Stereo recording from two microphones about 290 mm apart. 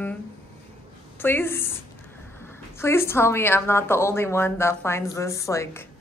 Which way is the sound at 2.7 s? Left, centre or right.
Centre.